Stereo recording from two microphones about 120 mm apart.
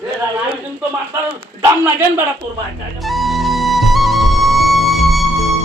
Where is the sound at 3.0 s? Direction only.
Centre (ahead or behind).